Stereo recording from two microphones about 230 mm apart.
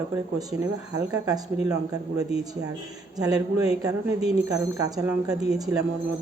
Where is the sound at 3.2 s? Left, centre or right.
Centre.